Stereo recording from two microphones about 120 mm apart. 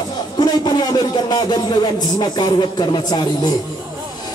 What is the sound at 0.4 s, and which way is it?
Speech, 35° left (ahead or behind).